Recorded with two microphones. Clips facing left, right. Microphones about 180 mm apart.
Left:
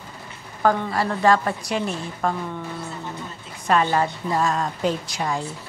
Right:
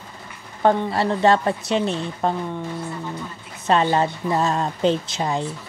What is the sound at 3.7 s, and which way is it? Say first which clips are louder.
A woman's voice: right 2 dB; 25° right (ahead or behind).